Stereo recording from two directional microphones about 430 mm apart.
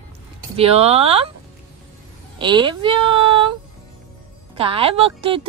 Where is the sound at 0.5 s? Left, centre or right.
Centre.